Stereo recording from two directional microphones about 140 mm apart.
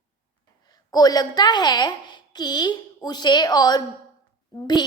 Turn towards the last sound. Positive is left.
turn(degrees=30)  # may be behind; listen again after turning